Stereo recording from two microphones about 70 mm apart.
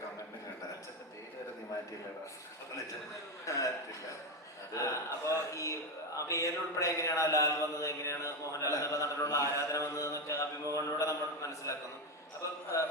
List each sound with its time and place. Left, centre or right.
3.4 s chuckle: left
4.7 s a sound: left
12.7 s mantra: left